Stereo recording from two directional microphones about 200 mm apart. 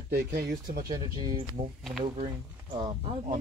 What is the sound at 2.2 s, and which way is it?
Speech, 20° right (ahead or behind).